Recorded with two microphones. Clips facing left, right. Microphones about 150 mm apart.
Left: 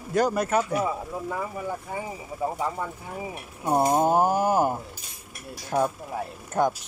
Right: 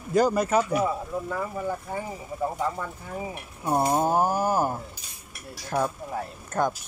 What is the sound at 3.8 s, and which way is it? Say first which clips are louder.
Speech: left 2 dB; 20° left (ahead or behind).